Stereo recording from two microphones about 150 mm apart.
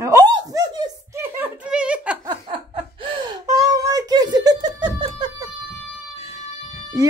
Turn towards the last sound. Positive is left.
turn(degrees=-25)  # may be behind; listen again after turning